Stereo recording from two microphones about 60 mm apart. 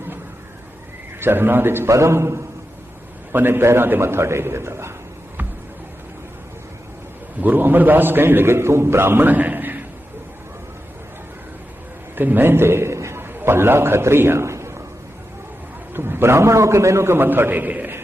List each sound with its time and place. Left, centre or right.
1.2 s a man's voice: right
1.9 s a man's voice: right
3.3 s a man's voice: right
7.4 s a man's voice: right
12.1 s a man's voice: right
15.9 s a man's voice: right